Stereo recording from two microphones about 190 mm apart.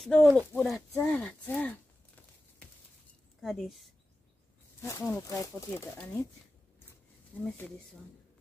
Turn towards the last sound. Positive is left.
turn(degrees=10)  # may be behind; listen again after turning